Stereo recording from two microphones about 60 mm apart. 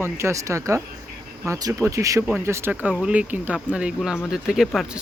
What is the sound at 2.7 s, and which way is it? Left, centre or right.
Speech, right.